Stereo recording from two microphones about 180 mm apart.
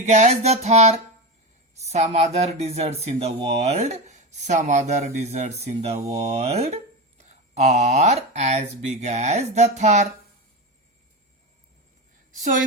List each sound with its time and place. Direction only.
0.0 s speech: 40° right (ahead or behind)
12.3 s a woman's voice: 45° right (ahead or behind)